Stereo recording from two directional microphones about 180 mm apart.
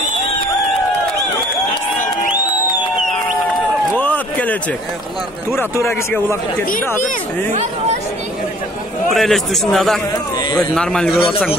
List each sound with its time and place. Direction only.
3.9 s a sound: 10° left (ahead or behind)
5.6 s speech: 15° left (ahead or behind)
7.5 s speech: 35° right (ahead or behind)
9.1 s a man's voice: centre (ahead or behind)